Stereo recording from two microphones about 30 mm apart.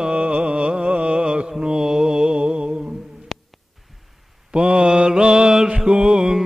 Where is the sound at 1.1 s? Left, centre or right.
Right.